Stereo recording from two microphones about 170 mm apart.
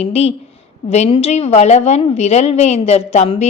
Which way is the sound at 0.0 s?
40° left (ahead or behind).